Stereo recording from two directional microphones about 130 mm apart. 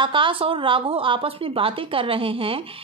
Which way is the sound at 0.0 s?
40° right (ahead or behind).